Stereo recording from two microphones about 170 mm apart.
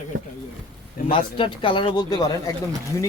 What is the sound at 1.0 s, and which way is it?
Speech, 30° left (ahead or behind).